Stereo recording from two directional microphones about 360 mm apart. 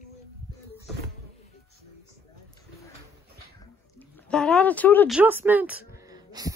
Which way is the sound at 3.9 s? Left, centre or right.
Centre.